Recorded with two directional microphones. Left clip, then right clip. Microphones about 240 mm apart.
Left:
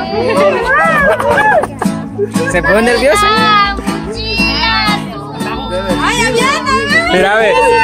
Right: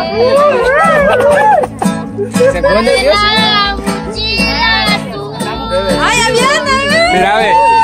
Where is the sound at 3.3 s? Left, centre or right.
Right.